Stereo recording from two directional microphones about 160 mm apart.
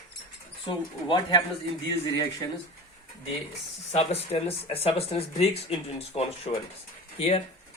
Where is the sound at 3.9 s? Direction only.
40° left (ahead or behind).